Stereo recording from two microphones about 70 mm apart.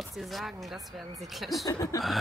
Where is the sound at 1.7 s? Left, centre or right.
Left.